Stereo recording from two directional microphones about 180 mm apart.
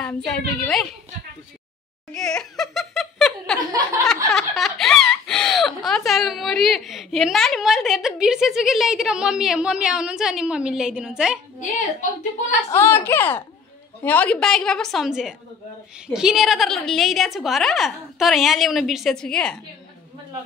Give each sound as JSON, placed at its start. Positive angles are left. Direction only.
{"t": 0.0, "sound": "speech", "side_deg": 5}
{"t": 2.1, "sound": "speech", "side_deg": 0}
{"t": 12.0, "sound": "a woman's voice", "side_deg": 45}
{"t": 12.7, "sound": "a woman's voice", "side_deg": 15}